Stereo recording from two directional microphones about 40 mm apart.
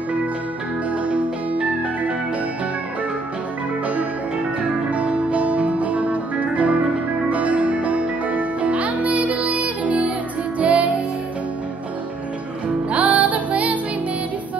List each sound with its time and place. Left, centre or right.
1.0 s music: right
4.9 s music: right
12.9 s music: right